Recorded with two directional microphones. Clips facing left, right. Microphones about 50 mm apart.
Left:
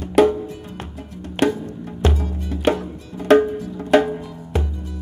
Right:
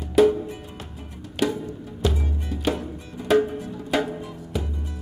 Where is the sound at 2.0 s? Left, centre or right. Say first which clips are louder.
Left 3 dB; left.